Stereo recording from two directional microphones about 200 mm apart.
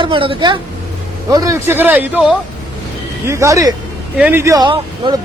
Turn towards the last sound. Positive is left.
turn(degrees=-25)  # may be behind; listen again after turning